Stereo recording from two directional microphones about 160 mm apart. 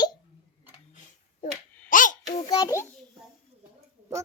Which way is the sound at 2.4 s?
20° left (ahead or behind).